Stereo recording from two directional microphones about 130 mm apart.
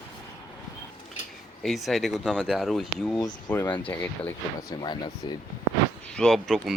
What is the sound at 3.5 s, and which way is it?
Speech, 15° left (ahead or behind).